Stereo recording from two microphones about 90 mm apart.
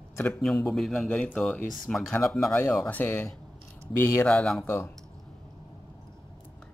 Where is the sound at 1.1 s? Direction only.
20° left (ahead or behind).